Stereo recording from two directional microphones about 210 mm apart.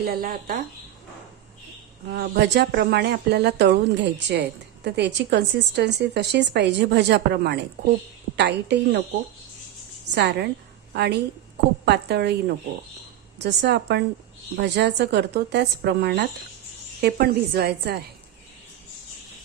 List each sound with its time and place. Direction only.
0.0 s speech: 45° right (ahead or behind)
2.0 s a woman's voice: 50° right (ahead or behind)
10.2 s speech: 50° right (ahead or behind)